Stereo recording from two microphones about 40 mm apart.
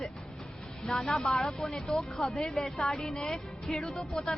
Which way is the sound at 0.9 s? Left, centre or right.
Centre.